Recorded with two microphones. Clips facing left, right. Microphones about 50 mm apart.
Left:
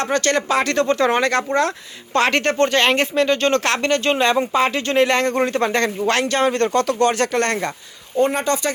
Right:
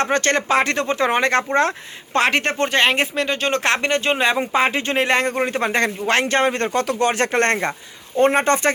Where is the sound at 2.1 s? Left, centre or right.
Centre.